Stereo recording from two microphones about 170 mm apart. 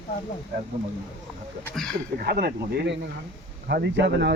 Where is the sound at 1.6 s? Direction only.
5° left (ahead or behind).